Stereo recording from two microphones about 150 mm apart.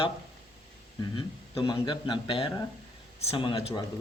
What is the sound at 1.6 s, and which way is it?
Speech, 30° left (ahead or behind).